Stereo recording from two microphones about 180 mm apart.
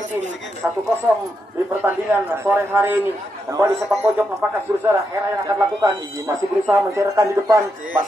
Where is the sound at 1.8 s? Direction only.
10° right (ahead or behind).